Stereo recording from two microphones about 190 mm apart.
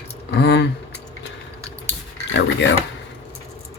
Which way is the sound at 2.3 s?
65° left (ahead or behind).